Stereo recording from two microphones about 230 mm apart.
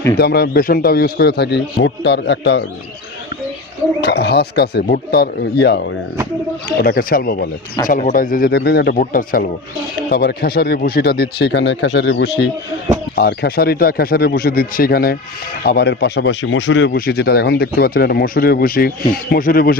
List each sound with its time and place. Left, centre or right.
0.2 s speech: left
4.0 s speech: left